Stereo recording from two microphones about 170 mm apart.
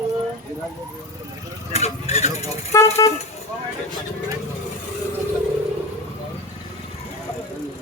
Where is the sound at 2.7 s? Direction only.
15° left (ahead or behind).